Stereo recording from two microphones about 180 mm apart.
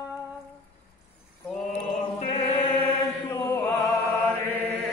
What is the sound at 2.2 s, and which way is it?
Chant, 25° left (ahead or behind).